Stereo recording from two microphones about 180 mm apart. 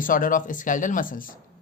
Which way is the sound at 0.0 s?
50° left (ahead or behind).